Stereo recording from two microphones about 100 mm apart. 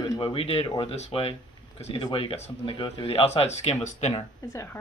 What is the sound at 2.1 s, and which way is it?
Speech, 65° left (ahead or behind).